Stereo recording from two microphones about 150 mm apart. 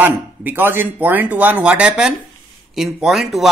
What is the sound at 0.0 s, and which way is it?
A man's voice, 10° right (ahead or behind).